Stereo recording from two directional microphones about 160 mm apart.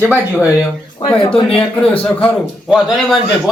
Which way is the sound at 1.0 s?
35° left (ahead or behind).